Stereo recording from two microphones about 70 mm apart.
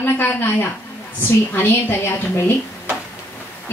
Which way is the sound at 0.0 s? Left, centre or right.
Left.